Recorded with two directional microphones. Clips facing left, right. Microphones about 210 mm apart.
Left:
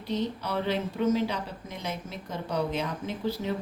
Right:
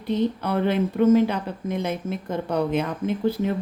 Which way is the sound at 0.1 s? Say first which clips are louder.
Right 7 dB; 55° right (ahead or behind).